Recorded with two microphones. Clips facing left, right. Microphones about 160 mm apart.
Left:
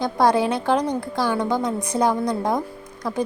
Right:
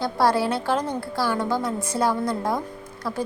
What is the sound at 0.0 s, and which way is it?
A woman's voice, 20° left (ahead or behind).